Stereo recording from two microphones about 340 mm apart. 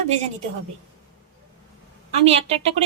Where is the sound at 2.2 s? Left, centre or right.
Centre.